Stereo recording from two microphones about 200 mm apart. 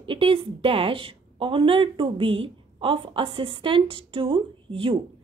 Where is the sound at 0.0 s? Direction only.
25° right (ahead or behind).